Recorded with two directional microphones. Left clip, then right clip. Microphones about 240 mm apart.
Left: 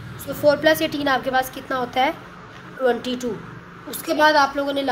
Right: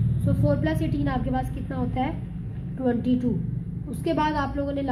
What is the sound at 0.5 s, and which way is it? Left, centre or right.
A woman's voice, left.